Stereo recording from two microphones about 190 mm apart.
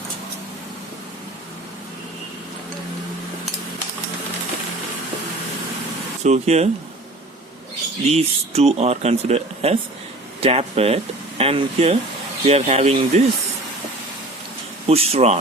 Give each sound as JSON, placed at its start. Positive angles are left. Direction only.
{"t": 6.2, "sound": "speech", "side_deg": -35}
{"t": 8.0, "sound": "speech", "side_deg": -35}
{"t": 14.8, "sound": "speech", "side_deg": -30}